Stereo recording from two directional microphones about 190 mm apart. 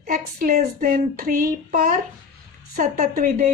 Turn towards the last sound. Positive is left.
turn(degrees=-45)  # may be behind; listen again after turning